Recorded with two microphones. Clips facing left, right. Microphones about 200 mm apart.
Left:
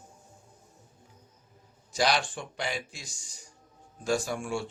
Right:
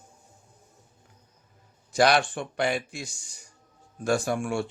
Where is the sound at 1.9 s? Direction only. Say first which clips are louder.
Right 6 dB; 60° right (ahead or behind).